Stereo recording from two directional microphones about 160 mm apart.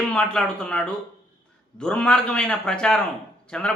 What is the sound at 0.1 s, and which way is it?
A man's voice, 5° left (ahead or behind).